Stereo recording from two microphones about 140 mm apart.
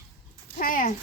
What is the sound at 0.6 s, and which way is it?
Speech, 75° left (ahead or behind).